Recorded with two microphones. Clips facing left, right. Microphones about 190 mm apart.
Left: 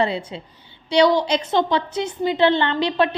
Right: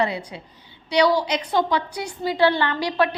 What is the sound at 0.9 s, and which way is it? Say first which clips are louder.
A woman's voice: left 3 dB; 25° left (ahead or behind).